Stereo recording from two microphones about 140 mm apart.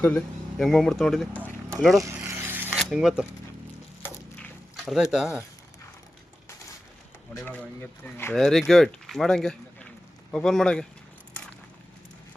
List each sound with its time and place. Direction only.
0.0 s speech: 10° left (ahead or behind)
0.5 s speech: centre (ahead or behind)
2.2 s zipper: 20° right (ahead or behind)
2.7 s speech: 5° right (ahead or behind)
4.0 s a sound: 10° left (ahead or behind)
5.1 s speech: 5° right (ahead or behind)
7.4 s speech: 10° left (ahead or behind)
8.4 s speech: centre (ahead or behind)